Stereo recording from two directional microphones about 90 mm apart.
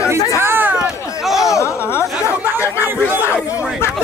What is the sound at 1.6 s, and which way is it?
Speech, 30° left (ahead or behind).